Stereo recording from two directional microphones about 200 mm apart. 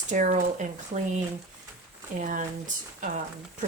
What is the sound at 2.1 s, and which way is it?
Speech, 40° right (ahead or behind).